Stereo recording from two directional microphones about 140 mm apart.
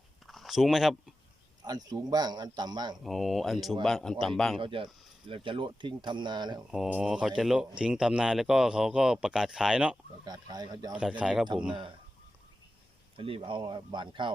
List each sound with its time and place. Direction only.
0.3 s a sound: centre (ahead or behind)
1.6 s a man's voice: 25° right (ahead or behind)
3.0 s speech: centre (ahead or behind)
4.6 s speech: 35° right (ahead or behind)
6.7 s speech: 5° right (ahead or behind)
10.2 s a man's voice: 30° right (ahead or behind)
10.9 s a man's voice: 10° right (ahead or behind)
11.7 s speech: 35° right (ahead or behind)
13.1 s speech: 40° right (ahead or behind)